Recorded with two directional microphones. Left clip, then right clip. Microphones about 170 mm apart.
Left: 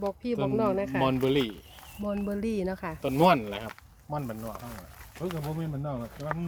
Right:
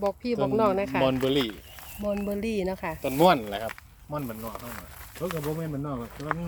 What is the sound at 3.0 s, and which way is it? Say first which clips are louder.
Speech: right 2 dB; 40° left (ahead or behind).